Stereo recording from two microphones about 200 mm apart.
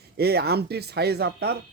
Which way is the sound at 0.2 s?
55° right (ahead or behind).